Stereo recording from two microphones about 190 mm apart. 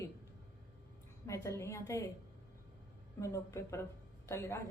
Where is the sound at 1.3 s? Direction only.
15° left (ahead or behind).